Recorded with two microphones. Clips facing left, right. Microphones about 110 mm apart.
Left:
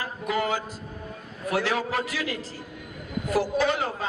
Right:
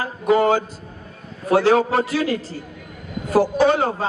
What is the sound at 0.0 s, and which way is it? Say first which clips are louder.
A man's voice: right 10 dB; 30° right (ahead or behind).